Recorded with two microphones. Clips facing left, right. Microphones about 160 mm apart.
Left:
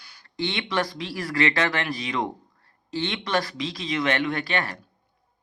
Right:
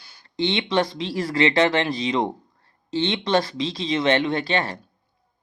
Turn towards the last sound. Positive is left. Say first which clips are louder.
# right 4 dB
turn(degrees=-25)  # may be behind; listen again after turning